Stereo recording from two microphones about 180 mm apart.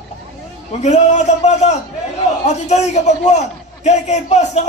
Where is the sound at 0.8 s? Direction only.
40° left (ahead or behind).